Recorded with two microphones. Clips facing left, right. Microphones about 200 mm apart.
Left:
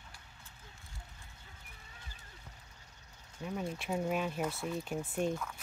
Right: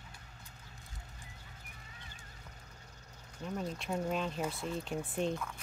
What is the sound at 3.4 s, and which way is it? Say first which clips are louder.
Speech: even; 5° left (ahead or behind).